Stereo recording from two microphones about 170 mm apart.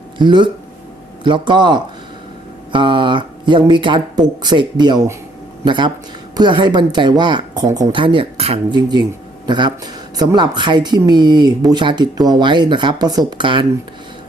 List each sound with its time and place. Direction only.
0.2 s speech: 25° right (ahead or behind)